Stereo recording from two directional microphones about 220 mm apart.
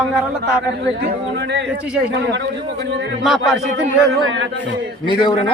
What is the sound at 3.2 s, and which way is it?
Speech, centre (ahead or behind).